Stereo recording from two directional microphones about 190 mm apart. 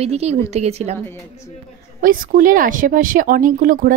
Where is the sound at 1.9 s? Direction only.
45° right (ahead or behind).